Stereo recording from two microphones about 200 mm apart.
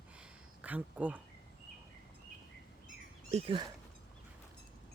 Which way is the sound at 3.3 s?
25° right (ahead or behind).